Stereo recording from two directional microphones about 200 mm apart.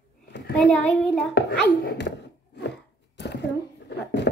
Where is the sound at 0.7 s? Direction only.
5° left (ahead or behind).